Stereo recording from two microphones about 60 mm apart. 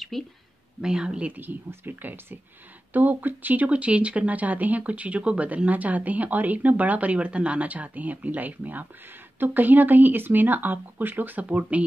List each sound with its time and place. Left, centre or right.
0.1 s speech: centre
0.7 s speech: centre
1.3 s speech: right